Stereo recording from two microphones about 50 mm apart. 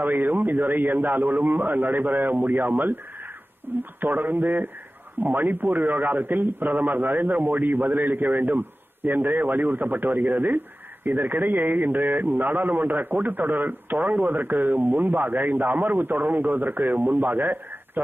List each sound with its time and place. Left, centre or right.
0.0 s a man's voice: right